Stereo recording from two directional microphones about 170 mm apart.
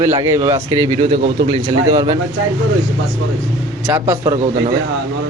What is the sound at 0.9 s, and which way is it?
A man's voice, 35° right (ahead or behind).